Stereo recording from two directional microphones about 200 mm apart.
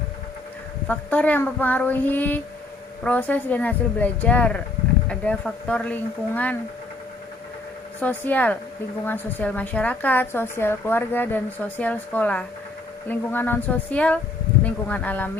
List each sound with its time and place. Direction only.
0.9 s a woman's voice: 5° left (ahead or behind)
8.0 s a woman's voice: 10° left (ahead or behind)